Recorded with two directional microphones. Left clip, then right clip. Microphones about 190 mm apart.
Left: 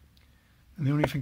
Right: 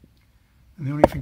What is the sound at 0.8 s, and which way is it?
Speech, 25° left (ahead or behind).